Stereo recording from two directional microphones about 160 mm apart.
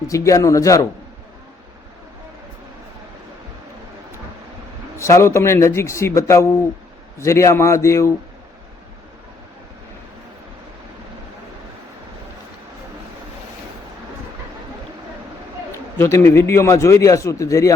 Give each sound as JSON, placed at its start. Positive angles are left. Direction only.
{"t": 0.1, "sound": "a man's voice", "side_deg": 20}
{"t": 4.9, "sound": "speech", "side_deg": 15}
{"t": 15.7, "sound": "a man's voice", "side_deg": 15}